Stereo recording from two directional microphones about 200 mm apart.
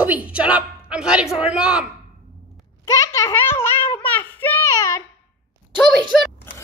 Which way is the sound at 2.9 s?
15° left (ahead or behind).